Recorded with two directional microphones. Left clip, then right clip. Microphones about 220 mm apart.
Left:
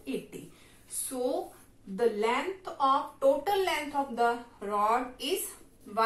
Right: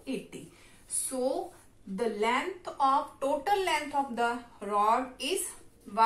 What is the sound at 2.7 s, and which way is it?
A woman's voice, 30° right (ahead or behind).